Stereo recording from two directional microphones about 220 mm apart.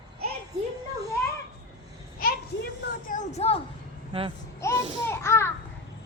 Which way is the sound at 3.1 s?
30° left (ahead or behind).